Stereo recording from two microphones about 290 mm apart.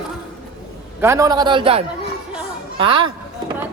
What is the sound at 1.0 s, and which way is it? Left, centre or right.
A man's voice, centre.